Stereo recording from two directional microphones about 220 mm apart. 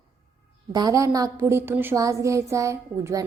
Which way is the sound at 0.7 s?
15° right (ahead or behind).